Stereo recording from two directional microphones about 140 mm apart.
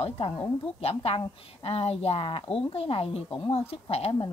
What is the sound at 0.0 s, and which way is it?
A woman's voice, 45° left (ahead or behind).